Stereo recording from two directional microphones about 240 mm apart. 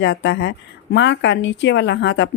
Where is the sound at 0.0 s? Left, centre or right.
Left.